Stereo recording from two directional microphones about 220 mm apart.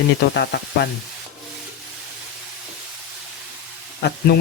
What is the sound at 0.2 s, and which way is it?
Speech, 50° left (ahead or behind).